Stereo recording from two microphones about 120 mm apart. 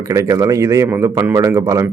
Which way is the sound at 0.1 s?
25° right (ahead or behind).